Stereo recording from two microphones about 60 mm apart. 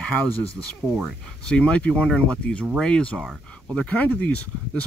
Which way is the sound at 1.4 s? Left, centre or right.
Centre.